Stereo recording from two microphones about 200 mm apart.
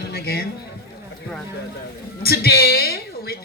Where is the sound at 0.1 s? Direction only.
50° left (ahead or behind).